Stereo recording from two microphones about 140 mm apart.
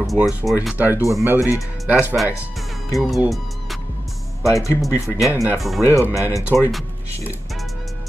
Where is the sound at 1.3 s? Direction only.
25° left (ahead or behind).